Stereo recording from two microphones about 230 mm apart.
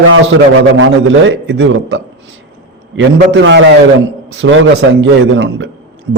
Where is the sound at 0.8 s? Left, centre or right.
Right.